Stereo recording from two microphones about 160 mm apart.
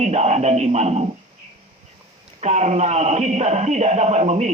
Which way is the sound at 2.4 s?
45° right (ahead or behind).